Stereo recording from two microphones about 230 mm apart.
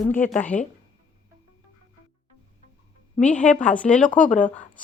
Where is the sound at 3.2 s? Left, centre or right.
Centre.